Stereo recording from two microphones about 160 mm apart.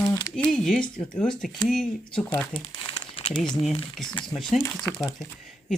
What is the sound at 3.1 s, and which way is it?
Crumpling, 35° left (ahead or behind).